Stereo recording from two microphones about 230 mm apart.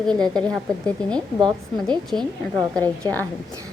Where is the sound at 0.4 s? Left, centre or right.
Centre.